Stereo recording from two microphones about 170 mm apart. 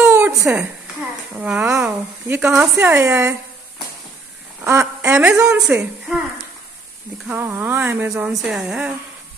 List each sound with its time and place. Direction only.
0.1 s a sound: 15° right (ahead or behind)
1.4 s a woman's voice: 5° right (ahead or behind)
4.6 s a woman's voice: 10° right (ahead or behind)
7.2 s a woman's voice: 10° right (ahead or behind)